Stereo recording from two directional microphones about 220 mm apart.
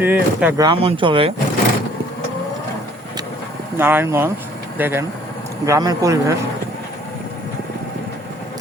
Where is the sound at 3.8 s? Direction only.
10° right (ahead or behind).